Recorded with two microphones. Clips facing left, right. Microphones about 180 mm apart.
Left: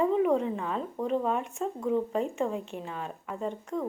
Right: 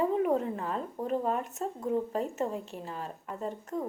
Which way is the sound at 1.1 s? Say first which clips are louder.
Left 1 dB; 45° right (ahead or behind).